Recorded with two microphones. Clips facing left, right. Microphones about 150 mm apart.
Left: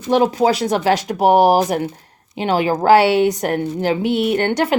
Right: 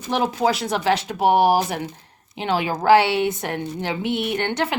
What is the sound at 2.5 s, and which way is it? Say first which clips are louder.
Speech: left 3 dB; 40° left (ahead or behind).